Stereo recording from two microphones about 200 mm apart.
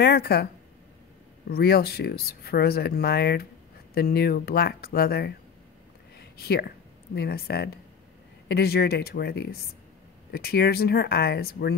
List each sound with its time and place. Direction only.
0.0 s speech: 50° left (ahead or behind)
1.5 s speech: 50° left (ahead or behind)
6.1 s a sound: 50° left (ahead or behind)
7.2 s speech: 50° left (ahead or behind)